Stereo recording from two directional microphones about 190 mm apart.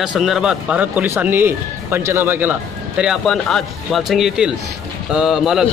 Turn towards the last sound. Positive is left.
turn(degrees=0)  # may be behind; listen again after turning